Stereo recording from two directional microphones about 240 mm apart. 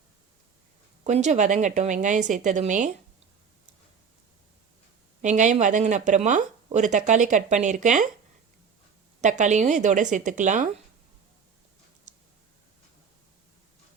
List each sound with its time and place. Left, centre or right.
1.0 s speech: right
5.2 s speech: right
9.2 s speech: right